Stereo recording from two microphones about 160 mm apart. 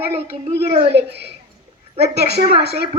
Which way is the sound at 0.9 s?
90° right.